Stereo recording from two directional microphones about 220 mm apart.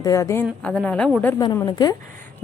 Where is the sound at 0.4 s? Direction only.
5° left (ahead or behind).